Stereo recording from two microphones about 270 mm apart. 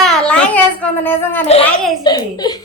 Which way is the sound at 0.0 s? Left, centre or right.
Centre.